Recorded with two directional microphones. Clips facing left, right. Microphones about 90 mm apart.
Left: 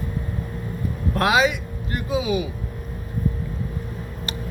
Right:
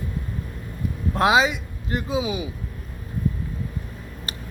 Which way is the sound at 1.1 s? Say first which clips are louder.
Right 1 dB; 25° right (ahead or behind).